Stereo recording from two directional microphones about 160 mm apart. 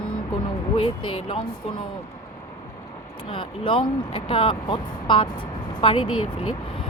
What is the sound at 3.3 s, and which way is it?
Speech, 35° left (ahead or behind).